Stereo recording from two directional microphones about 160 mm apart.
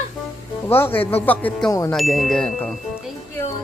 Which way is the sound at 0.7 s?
15° left (ahead or behind).